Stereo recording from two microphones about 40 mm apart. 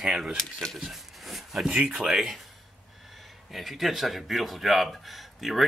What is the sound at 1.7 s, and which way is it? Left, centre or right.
Speech, right.